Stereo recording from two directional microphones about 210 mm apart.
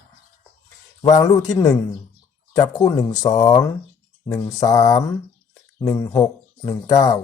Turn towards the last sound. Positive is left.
turn(degrees=20)  # may be behind; listen again after turning